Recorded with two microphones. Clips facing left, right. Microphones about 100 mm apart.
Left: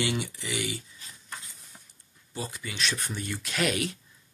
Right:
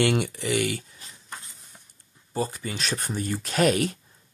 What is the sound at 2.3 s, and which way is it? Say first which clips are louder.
Speech: right 7 dB; 40° right (ahead or behind).